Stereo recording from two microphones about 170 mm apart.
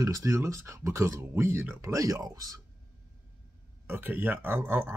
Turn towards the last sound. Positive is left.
turn(degrees=-10)  # may be behind; listen again after turning